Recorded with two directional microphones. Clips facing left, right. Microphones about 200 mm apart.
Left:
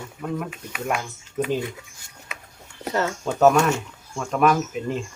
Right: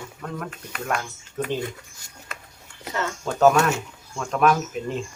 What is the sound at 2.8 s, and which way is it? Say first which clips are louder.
Speech: left 5 dB; 40° left (ahead or behind).